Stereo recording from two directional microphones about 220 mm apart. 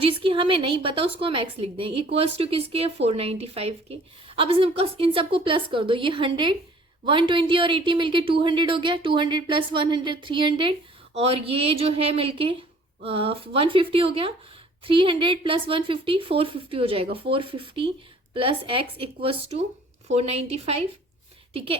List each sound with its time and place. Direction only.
0.0 s speech: 25° right (ahead or behind)